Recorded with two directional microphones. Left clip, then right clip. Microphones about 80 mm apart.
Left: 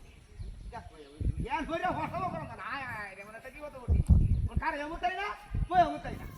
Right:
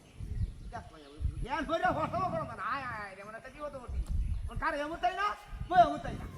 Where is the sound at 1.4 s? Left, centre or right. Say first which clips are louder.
Right 1 dB; right.